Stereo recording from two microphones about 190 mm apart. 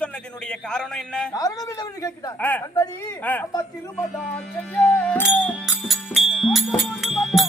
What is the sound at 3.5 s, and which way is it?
Music, 15° left (ahead or behind).